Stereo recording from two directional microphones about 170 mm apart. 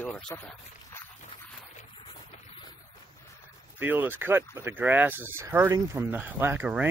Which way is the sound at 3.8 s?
10° right (ahead or behind).